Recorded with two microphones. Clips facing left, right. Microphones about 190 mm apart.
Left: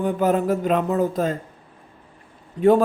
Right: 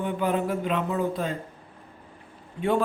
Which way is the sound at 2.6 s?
35° left (ahead or behind).